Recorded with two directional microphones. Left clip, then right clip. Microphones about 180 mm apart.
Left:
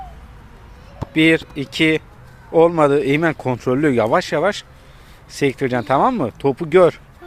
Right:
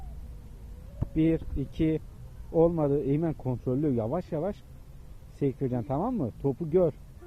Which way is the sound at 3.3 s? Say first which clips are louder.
Left 12 dB; 60° left (ahead or behind).